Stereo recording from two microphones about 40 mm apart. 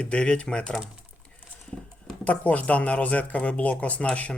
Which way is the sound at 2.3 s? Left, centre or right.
Left.